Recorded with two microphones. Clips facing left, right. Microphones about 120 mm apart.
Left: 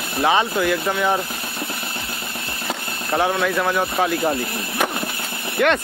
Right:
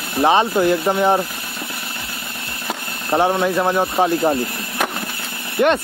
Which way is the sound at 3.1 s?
20° right (ahead or behind).